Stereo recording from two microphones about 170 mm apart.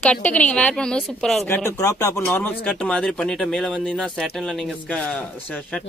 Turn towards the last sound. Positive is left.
turn(degrees=5)  # may be behind; listen again after turning